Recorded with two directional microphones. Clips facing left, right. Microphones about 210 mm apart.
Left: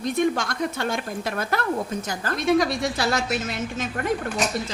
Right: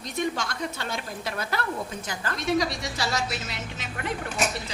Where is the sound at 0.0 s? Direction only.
55° left (ahead or behind).